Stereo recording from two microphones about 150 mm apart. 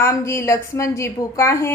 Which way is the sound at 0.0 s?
20° left (ahead or behind).